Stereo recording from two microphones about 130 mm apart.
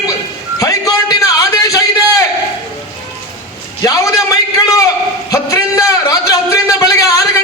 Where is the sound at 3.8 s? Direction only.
25° left (ahead or behind).